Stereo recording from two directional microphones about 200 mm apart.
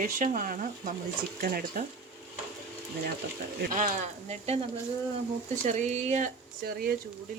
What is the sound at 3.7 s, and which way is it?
Speech, 40° right (ahead or behind).